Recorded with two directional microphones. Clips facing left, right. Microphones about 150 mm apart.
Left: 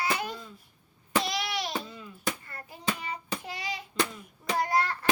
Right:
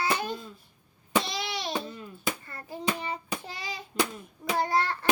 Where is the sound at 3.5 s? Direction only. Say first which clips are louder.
Left 2 dB; 30° right (ahead or behind).